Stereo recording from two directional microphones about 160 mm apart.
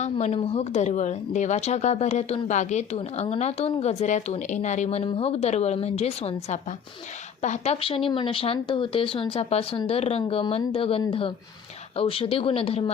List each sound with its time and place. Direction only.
0.0 s a woman's voice: 45° left (ahead or behind)